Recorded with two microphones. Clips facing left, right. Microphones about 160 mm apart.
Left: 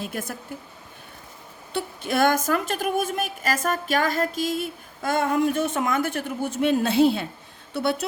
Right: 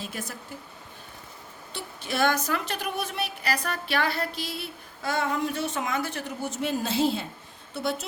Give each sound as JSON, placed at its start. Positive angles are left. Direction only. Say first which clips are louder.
{"t": 0.0, "sound": "a woman's voice", "louder": "left 5 dB", "side_deg": 50}
{"t": 1.7, "sound": "a woman's voice", "louder": "left 7 dB", "side_deg": 50}